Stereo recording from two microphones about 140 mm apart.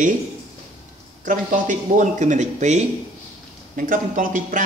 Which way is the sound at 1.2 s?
65° right (ahead or behind).